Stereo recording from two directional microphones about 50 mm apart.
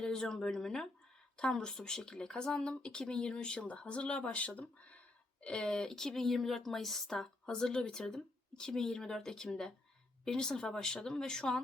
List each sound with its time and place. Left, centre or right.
0.0 s speech: centre